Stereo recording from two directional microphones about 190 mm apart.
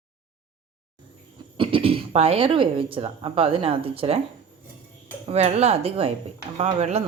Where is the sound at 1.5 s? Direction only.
30° right (ahead or behind).